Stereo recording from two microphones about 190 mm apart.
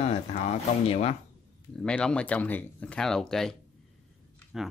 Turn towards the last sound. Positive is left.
turn(degrees=0)  # may be behind; listen again after turning